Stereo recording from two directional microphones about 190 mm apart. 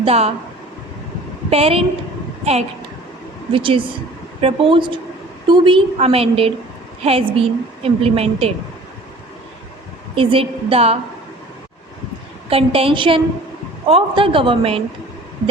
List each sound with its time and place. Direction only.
0.0 s a woman's voice: 35° right (ahead or behind)
1.5 s a woman's voice: 30° right (ahead or behind)
10.2 s a woman's voice: 30° right (ahead or behind)
12.5 s a woman's voice: 30° right (ahead or behind)